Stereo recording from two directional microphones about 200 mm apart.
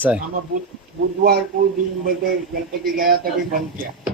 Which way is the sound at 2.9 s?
45° right (ahead or behind).